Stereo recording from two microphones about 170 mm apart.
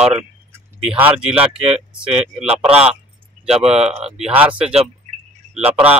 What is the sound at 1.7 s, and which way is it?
Speech, 35° right (ahead or behind).